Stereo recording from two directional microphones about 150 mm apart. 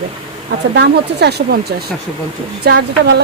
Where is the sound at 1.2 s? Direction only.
90° right.